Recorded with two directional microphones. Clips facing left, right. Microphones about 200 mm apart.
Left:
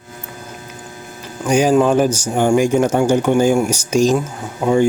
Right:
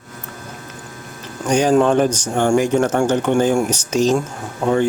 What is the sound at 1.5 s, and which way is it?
Speech, 10° left (ahead or behind).